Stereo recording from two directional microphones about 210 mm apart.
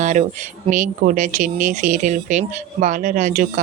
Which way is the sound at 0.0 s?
35° right (ahead or behind).